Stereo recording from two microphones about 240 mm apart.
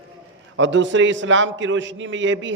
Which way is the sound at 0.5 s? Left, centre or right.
Right.